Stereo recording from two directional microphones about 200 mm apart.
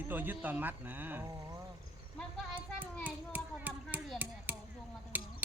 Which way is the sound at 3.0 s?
10° right (ahead or behind).